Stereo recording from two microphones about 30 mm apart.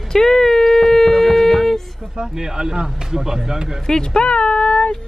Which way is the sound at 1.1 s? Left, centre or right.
Centre.